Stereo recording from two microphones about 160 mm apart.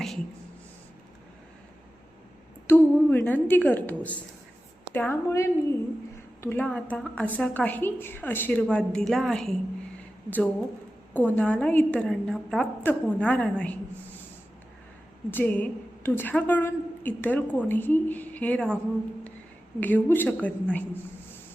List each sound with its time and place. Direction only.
2.6 s a woman's voice: 15° left (ahead or behind)
15.3 s a woman's voice: 10° left (ahead or behind)
19.8 s a woman's voice: 10° left (ahead or behind)